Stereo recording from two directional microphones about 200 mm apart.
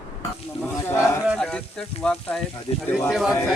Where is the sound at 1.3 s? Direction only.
5° left (ahead or behind).